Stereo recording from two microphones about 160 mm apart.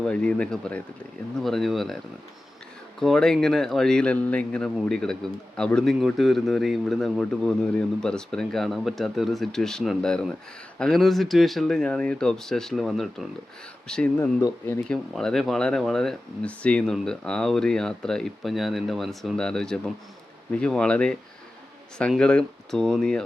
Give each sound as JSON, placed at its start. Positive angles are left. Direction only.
{"t": 0.0, "sound": "speech", "side_deg": 5}
{"t": 3.0, "sound": "speech", "side_deg": 0}
{"t": 14.2, "sound": "speech", "side_deg": 15}
{"t": 14.8, "sound": "speech", "side_deg": 5}